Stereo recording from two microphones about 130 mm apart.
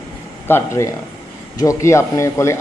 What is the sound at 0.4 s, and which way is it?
A man's voice, 20° left (ahead or behind).